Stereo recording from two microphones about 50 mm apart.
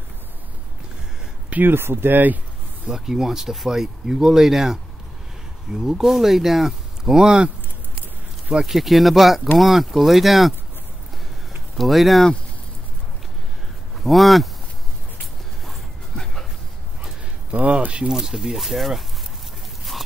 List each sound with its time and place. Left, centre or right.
1.5 s speech: right
2.9 s speech: centre
7.2 s speech: right
8.6 s speech: centre
11.7 s speech: centre
13.9 s speech: centre
17.0 s a sound: right
18.1 s speech: centre